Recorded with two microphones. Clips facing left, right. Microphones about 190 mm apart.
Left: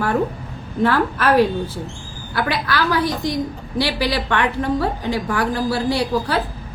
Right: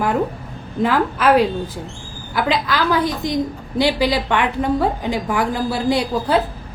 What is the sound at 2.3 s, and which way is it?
A woman's voice, 20° right (ahead or behind).